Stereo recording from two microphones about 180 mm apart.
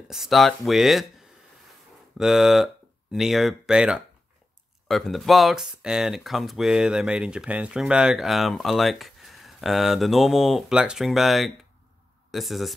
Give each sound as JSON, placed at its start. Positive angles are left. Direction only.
{"t": 0.1, "sound": "speech", "side_deg": 0}
{"t": 2.1, "sound": "speech", "side_deg": 0}